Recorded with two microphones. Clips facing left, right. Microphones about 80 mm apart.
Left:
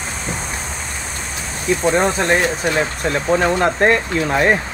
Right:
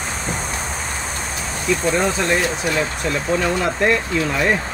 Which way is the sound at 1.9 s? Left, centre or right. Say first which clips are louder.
Left 3 dB; left.